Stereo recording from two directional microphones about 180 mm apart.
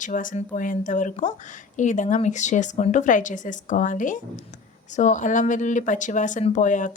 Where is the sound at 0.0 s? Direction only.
50° left (ahead or behind).